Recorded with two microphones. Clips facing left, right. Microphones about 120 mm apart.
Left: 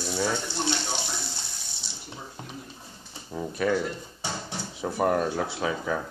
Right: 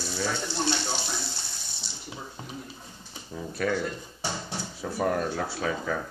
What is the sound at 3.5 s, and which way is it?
Speech, 15° left (ahead or behind).